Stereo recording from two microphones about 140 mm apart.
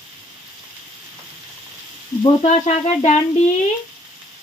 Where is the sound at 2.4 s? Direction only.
45° left (ahead or behind).